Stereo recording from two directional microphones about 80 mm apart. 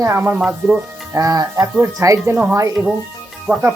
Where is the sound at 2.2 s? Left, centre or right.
Right.